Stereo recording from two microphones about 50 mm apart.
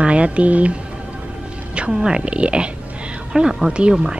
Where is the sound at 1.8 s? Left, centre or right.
Centre.